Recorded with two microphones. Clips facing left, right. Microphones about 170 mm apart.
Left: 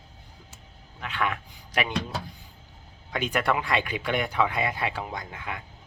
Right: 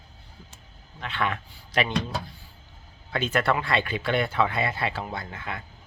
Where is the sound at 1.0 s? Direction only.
10° left (ahead or behind).